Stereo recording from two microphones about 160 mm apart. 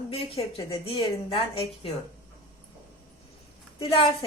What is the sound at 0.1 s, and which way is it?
Speech, 35° left (ahead or behind).